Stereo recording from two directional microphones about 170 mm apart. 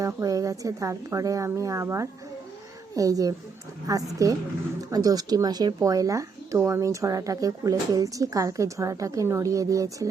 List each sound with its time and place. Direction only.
0.0 s speech: 20° right (ahead or behind)